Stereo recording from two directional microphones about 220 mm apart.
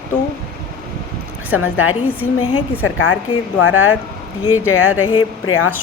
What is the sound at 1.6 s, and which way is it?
Speech, 70° left (ahead or behind).